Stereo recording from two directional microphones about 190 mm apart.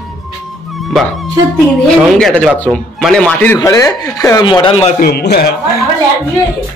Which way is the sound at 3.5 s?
20° left (ahead or behind).